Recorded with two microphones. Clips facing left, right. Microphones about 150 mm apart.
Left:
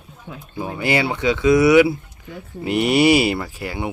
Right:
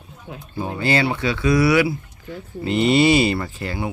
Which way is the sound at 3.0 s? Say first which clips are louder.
Left 1 dB; 10° left (ahead or behind).